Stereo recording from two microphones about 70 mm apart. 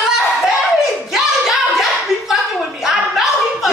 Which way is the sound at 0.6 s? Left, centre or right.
Centre.